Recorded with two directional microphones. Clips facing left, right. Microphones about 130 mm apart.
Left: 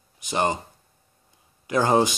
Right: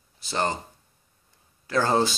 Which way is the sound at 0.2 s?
15° left (ahead or behind).